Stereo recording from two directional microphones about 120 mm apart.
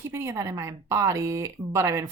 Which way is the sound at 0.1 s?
25° right (ahead or behind).